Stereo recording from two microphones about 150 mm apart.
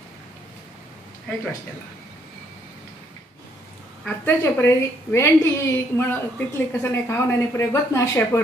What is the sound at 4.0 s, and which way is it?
A woman's voice, 15° left (ahead or behind).